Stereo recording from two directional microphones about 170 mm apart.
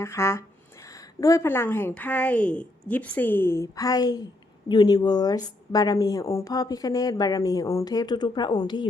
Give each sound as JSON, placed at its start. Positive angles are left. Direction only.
{"t": 0.0, "sound": "a woman's voice", "side_deg": 15}